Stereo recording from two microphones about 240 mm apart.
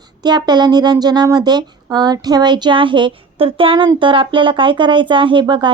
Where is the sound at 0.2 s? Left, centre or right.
Centre.